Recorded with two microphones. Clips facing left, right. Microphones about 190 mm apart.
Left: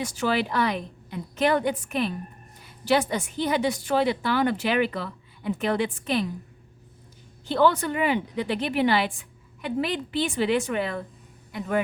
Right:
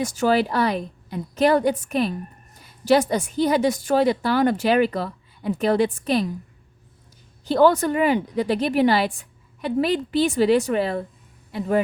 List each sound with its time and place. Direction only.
0.0 s a woman's voice: 45° right (ahead or behind)
7.4 s a woman's voice: 40° right (ahead or behind)